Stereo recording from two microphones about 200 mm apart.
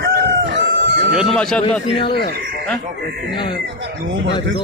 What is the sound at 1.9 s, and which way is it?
Speech, 25° left (ahead or behind).